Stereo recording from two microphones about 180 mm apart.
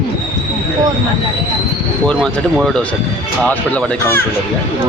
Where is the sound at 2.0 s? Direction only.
5° left (ahead or behind).